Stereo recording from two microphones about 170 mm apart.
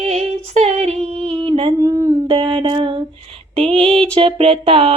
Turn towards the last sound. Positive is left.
turn(degrees=-30)  # may be behind; listen again after turning